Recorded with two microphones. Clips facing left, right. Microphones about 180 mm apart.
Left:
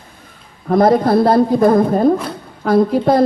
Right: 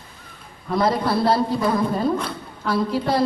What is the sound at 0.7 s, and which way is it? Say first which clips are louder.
A woman's voice: left 9 dB; 50° left (ahead or behind).